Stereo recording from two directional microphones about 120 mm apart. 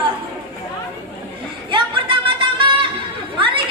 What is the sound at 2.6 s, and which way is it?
Music, 45° right (ahead or behind).